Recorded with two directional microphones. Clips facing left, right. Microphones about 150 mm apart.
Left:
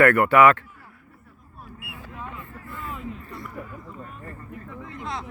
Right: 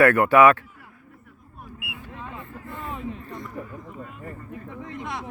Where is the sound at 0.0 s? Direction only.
15° right (ahead or behind).